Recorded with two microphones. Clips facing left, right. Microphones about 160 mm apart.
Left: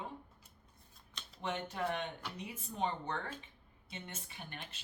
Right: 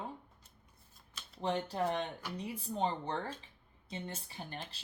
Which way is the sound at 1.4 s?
35° right (ahead or behind).